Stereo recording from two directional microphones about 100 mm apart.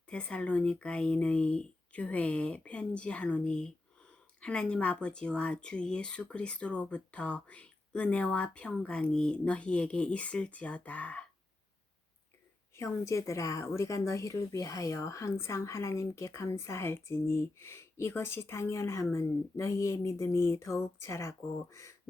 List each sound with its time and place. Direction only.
0.1 s speech: 10° left (ahead or behind)
12.7 s speech: 30° left (ahead or behind)